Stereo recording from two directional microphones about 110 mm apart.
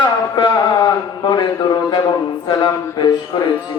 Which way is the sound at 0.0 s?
40° left (ahead or behind).